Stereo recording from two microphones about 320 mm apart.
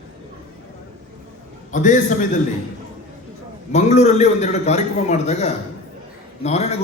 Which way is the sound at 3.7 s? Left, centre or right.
Left.